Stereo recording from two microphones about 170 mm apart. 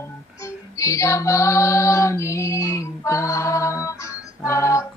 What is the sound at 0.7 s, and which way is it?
Female singing, 15° left (ahead or behind).